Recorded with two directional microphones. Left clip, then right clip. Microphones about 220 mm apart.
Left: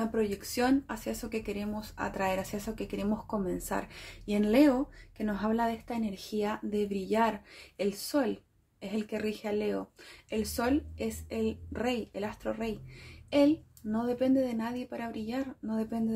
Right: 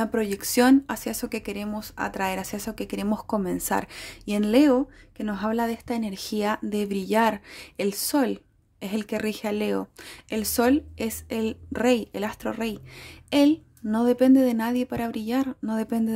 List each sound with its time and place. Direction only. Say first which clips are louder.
0.0 s speech: right 5 dB; 50° right (ahead or behind)